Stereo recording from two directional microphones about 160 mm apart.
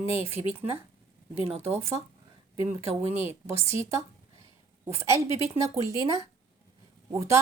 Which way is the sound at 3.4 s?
20° right (ahead or behind).